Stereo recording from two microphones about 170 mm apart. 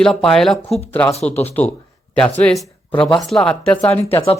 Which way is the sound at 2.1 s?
5° left (ahead or behind).